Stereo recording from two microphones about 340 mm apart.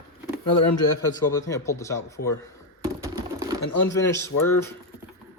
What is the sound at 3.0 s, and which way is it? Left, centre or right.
Typing, centre.